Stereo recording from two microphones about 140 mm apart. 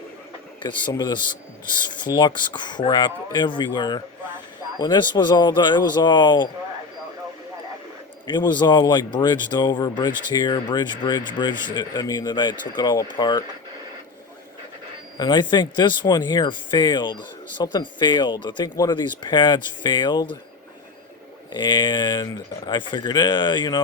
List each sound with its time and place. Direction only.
0.6 s speech: 35° left (ahead or behind)
8.3 s speech: 30° left (ahead or behind)
15.2 s speech: 30° left (ahead or behind)
21.5 s speech: 35° left (ahead or behind)